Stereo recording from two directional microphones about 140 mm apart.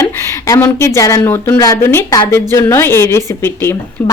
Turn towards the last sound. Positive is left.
turn(degrees=15)  # may be behind; listen again after turning